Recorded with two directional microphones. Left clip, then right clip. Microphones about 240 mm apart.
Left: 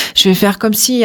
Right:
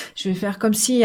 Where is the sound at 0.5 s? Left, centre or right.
Left.